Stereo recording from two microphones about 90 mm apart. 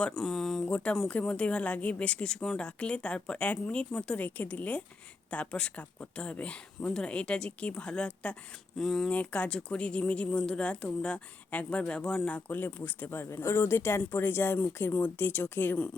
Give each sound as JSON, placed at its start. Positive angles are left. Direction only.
{"t": 0.2, "sound": "speech", "side_deg": 5}
{"t": 9.0, "sound": "speech", "side_deg": 15}